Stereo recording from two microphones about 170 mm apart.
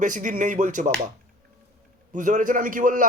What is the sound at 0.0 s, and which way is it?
Speech, 50° right (ahead or behind).